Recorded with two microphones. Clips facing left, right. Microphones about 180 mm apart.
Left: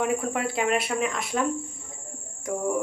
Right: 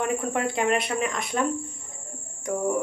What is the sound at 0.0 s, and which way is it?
Speech, 5° left (ahead or behind).